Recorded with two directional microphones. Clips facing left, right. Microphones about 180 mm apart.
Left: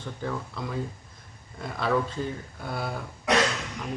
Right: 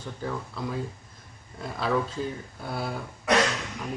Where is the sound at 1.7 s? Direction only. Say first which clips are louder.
Left 1 dB; 5° right (ahead or behind).